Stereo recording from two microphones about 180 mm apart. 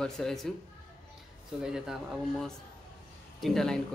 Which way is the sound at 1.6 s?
5° right (ahead or behind).